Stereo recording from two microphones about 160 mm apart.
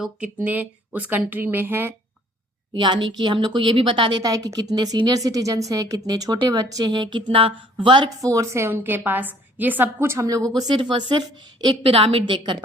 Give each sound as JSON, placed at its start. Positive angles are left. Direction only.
{"t": 0.0, "sound": "speech", "side_deg": -10}
{"t": 2.7, "sound": "speech", "side_deg": -30}